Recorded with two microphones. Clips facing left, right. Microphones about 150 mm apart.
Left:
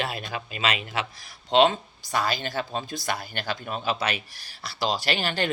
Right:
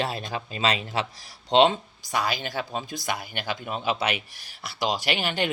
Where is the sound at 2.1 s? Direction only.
15° right (ahead or behind).